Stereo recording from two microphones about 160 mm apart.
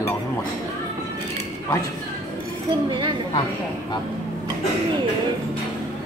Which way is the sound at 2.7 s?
30° right (ahead or behind).